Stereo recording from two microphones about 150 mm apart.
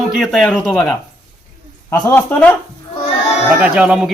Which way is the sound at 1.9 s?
15° left (ahead or behind).